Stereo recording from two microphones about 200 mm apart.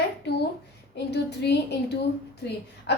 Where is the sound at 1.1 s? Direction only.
55° left (ahead or behind).